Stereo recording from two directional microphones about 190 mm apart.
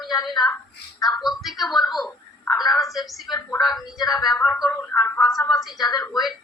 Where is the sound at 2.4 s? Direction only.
15° left (ahead or behind).